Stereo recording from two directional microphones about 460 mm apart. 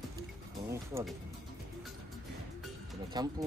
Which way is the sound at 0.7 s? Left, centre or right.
Centre.